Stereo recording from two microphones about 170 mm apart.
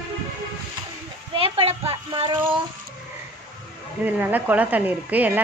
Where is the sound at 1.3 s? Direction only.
35° right (ahead or behind).